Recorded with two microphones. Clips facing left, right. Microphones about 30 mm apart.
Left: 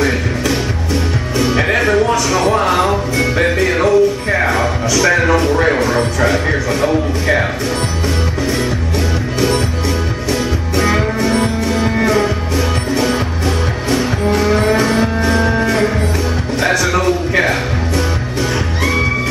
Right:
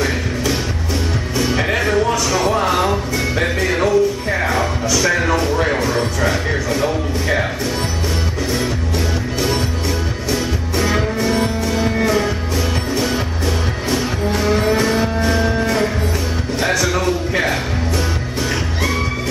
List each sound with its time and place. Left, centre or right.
1.4 s music: centre
5.0 s speech: centre
10.3 s music: centre